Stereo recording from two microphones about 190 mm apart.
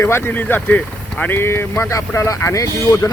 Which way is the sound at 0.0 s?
10° left (ahead or behind).